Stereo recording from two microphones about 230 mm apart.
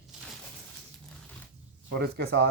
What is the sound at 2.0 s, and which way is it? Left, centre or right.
Speech, right.